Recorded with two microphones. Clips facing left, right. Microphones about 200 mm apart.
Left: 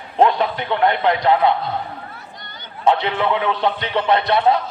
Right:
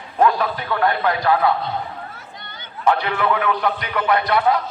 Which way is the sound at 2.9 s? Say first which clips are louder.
Left 1 dB; 25° left (ahead or behind).